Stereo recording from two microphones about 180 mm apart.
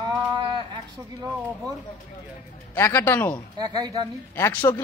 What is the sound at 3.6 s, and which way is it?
Speech, 20° right (ahead or behind).